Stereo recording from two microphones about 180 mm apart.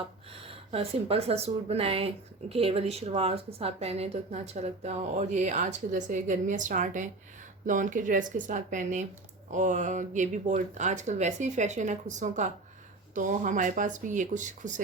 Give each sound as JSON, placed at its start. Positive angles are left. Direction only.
{"t": 0.3, "sound": "a woman's voice", "side_deg": -30}